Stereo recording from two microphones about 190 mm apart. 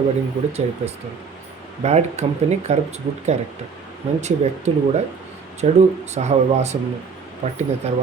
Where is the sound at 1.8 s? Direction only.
35° right (ahead or behind).